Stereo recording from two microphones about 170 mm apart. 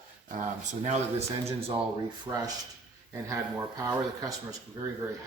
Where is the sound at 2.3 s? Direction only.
25° right (ahead or behind).